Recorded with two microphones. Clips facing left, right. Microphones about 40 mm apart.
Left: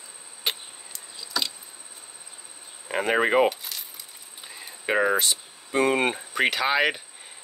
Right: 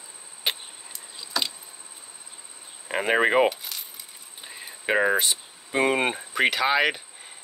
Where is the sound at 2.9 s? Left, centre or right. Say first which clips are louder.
Right 1 dB; centre.